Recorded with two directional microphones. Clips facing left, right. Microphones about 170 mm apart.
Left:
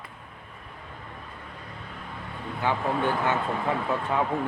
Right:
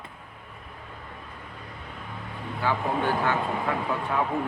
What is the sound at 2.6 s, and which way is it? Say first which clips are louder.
Speech: even; 20° left (ahead or behind).